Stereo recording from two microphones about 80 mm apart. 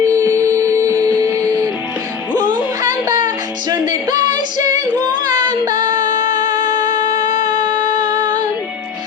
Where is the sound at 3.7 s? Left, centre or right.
Right.